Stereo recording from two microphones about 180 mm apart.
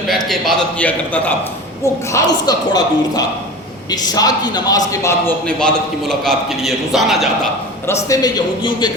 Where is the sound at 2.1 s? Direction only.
25° left (ahead or behind).